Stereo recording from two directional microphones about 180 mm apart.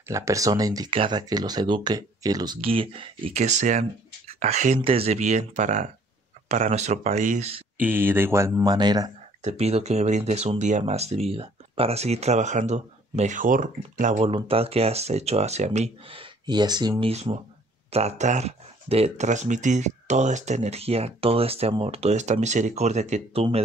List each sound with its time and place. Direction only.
0.1 s speech: 15° right (ahead or behind); by 4.7 s 40° right (ahead or behind)
4.7 s speech: 30° right (ahead or behind)
7.8 s speech: 10° right (ahead or behind)
9.4 s speech: 35° right (ahead or behind)
14.2 s speech: 30° right (ahead or behind)
17.1 s speech: 35° right (ahead or behind)